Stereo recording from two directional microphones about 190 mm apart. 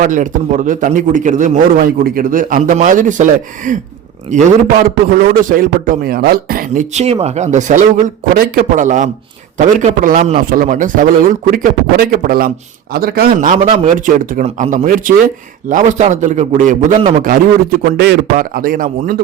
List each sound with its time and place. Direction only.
0.0 s a man's voice: 40° right (ahead or behind)
18.0 s a man's voice: 55° right (ahead or behind)